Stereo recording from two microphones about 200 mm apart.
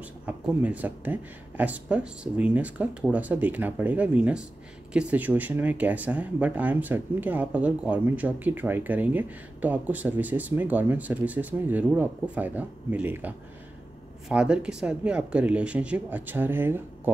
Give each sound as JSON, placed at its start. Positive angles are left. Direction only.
{"t": 0.3, "sound": "speech", "side_deg": -10}
{"t": 14.3, "sound": "speech", "side_deg": -5}